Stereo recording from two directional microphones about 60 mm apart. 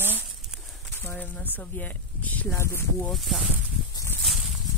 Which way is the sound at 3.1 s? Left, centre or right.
Centre.